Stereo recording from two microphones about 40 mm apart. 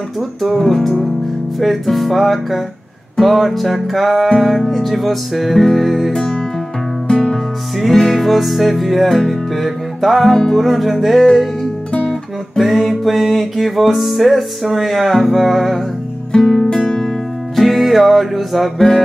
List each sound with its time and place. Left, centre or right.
0.4 s music: centre
7.8 s music: centre
10.3 s music: centre
10.6 s music: centre
12.5 s music: centre
16.3 s music: centre
17.6 s music: centre